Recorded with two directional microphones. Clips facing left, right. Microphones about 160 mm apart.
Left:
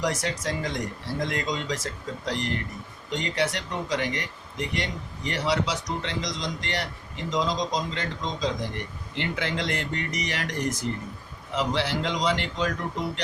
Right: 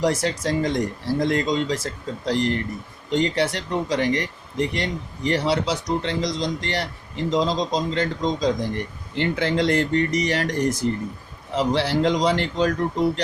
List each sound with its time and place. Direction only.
0.0 s speech: 30° right (ahead or behind)